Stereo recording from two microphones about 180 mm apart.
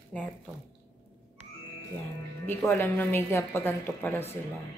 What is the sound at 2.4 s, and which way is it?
Speech, 10° left (ahead or behind).